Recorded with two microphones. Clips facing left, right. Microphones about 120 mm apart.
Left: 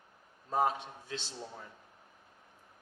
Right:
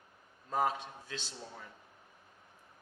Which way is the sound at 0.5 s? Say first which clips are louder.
Left 2 dB; 25° left (ahead or behind).